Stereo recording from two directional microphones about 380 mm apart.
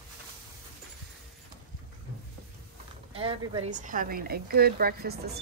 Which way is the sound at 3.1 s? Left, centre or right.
Centre.